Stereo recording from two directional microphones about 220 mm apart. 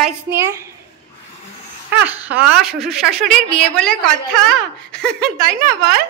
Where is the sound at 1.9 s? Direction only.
10° right (ahead or behind).